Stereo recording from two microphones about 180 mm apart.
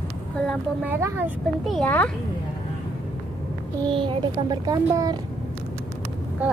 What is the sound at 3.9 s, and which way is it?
Speech, 25° right (ahead or behind).